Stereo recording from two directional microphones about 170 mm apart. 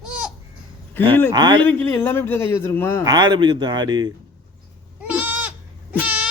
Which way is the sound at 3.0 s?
25° right (ahead or behind).